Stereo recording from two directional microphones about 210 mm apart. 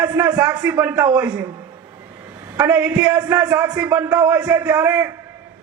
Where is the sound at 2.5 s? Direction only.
5° right (ahead or behind).